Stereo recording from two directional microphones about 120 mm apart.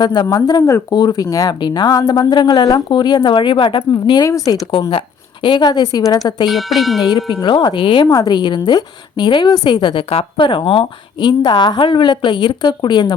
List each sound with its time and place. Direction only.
0.0 s speech: 35° left (ahead or behind)
4.2 s speech: 30° left (ahead or behind)
4.7 s speech: 50° left (ahead or behind)
6.5 s speech: centre (ahead or behind)
7.4 s speech: 40° left (ahead or behind)
8.0 s speech: 30° left (ahead or behind)